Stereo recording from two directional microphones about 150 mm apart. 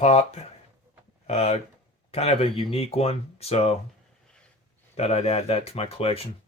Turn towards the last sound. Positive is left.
turn(degrees=40)  # may be behind; listen again after turning